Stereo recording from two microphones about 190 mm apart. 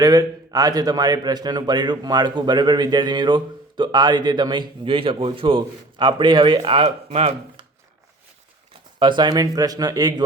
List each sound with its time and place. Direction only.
0.0 s speech: 20° right (ahead or behind)
9.0 s speech: 25° right (ahead or behind)